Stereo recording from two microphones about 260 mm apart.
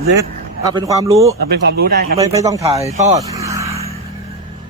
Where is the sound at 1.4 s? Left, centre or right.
Right.